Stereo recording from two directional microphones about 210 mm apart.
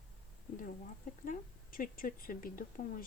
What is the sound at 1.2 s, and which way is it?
Speech, 40° left (ahead or behind).